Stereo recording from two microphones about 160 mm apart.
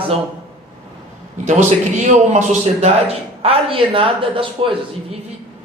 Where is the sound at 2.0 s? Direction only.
45° right (ahead or behind).